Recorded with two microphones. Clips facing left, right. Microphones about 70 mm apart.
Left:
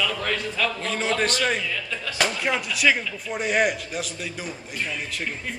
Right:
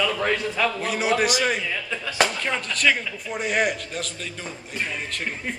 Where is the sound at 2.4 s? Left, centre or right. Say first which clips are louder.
Left 1 dB; centre.